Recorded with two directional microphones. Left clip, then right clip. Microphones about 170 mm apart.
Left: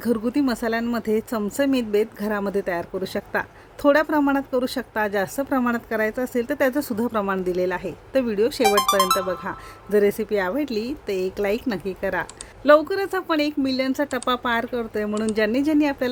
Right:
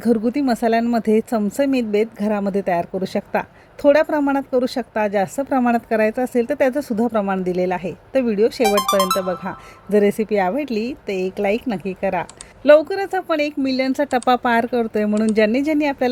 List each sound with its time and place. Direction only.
0.0 s a woman's voice: 10° right (ahead or behind)